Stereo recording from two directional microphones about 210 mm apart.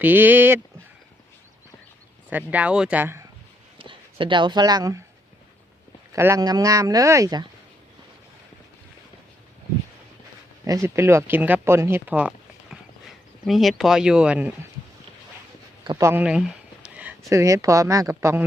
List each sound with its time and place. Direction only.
0.0 s speech: 10° right (ahead or behind)
2.3 s speech: 5° right (ahead or behind)
3.8 s speech: 25° right (ahead or behind)
6.1 s speech: 15° right (ahead or behind)
10.7 s speech: 15° right (ahead or behind)
13.4 s speech: centre (ahead or behind)
15.8 s speech: 20° right (ahead or behind)